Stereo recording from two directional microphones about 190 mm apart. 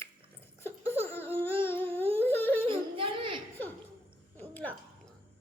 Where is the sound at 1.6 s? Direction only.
10° left (ahead or behind).